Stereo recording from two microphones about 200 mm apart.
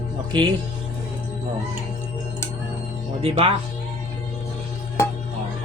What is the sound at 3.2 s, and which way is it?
Speech, 30° right (ahead or behind).